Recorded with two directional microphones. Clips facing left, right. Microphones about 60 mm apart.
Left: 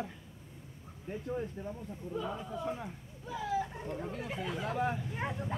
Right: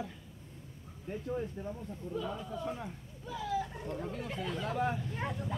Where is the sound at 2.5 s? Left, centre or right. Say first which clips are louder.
Left 1 dB; centre.